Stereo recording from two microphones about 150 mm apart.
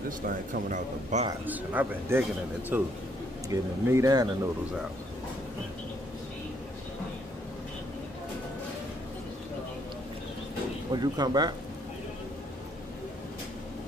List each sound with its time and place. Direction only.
0.3 s speech: 65° right (ahead or behind)
1.4 s speech: 10° right (ahead or behind)
10.9 s speech: 25° right (ahead or behind)